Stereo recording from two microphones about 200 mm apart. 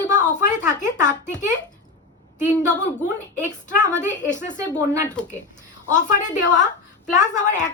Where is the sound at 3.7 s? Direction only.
40° left (ahead or behind).